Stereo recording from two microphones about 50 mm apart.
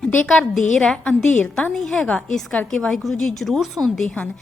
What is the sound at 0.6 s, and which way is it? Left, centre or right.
A woman's voice, centre.